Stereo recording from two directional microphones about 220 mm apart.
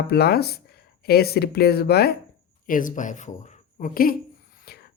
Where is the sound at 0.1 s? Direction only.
45° left (ahead or behind).